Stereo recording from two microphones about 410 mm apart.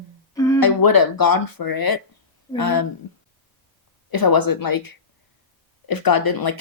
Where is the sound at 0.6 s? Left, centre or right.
Left.